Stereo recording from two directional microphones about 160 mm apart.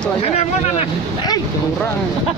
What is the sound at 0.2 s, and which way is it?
Speech, 40° left (ahead or behind).